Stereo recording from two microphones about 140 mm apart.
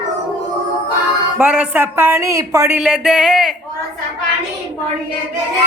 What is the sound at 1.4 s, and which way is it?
Speech, 10° right (ahead or behind).